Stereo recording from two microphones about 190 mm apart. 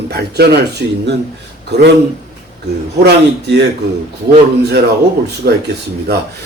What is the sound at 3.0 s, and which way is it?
Speech, 60° right (ahead or behind).